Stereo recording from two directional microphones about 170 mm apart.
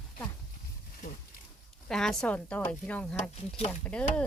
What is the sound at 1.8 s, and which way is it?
Speech, 5° left (ahead or behind).